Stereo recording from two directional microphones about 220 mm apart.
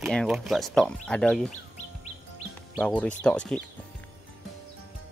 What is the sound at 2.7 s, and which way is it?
Speech, 5° left (ahead or behind).